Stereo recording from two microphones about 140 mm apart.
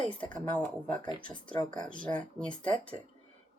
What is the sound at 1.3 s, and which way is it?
Speech, 35° left (ahead or behind).